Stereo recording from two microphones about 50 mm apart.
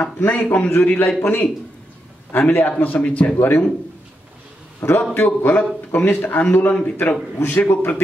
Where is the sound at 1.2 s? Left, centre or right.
Left.